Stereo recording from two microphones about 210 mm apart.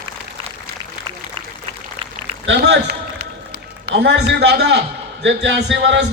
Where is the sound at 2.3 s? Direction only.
55° right (ahead or behind).